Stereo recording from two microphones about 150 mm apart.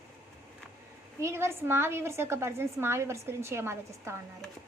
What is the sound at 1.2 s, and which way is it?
A woman's voice, 15° right (ahead or behind).